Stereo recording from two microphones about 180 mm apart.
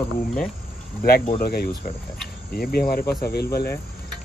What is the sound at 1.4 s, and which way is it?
Cricket, 60° left (ahead or behind).